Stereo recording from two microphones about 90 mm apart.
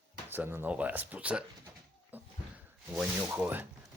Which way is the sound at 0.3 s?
20° right (ahead or behind).